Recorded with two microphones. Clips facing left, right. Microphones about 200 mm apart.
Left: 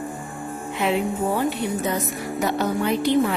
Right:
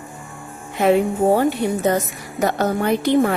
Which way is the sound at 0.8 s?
45° right (ahead or behind).